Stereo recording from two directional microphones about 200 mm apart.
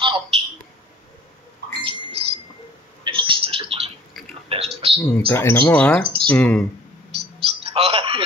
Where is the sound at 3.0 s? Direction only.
25° right (ahead or behind).